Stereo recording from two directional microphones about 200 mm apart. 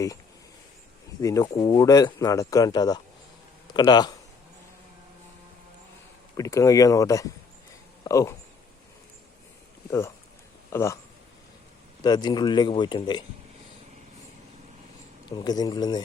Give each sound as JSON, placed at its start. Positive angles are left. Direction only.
{"t": 1.2, "sound": "speech", "side_deg": 15}
{"t": 6.3, "sound": "speech", "side_deg": 15}
{"t": 10.7, "sound": "speech", "side_deg": 15}
{"t": 12.0, "sound": "speech", "side_deg": 20}
{"t": 15.3, "sound": "speech", "side_deg": 20}